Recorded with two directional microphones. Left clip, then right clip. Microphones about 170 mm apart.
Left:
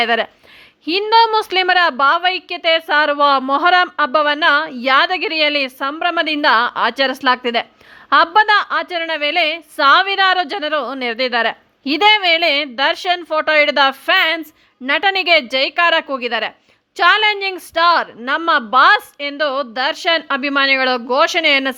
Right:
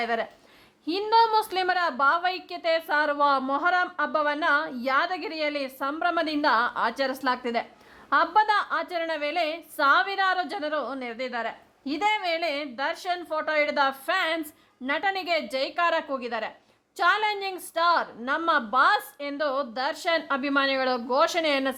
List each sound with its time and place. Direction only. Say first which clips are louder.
0.0 s a woman's voice: left 12 dB; 30° left (ahead or behind)